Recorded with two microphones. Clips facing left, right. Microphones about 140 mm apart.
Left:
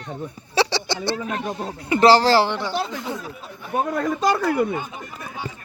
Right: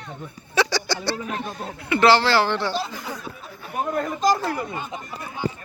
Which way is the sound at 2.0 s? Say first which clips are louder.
Left 3 dB; 40° left (ahead or behind).